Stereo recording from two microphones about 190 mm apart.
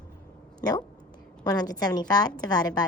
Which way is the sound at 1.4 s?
20° left (ahead or behind).